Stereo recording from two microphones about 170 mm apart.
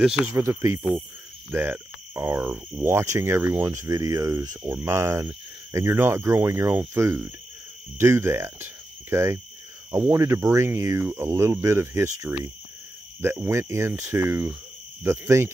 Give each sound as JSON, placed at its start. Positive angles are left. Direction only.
{"t": 0.3, "sound": "speech", "side_deg": -20}
{"t": 14.3, "sound": "cricket", "side_deg": -5}
{"t": 15.0, "sound": "speech", "side_deg": -15}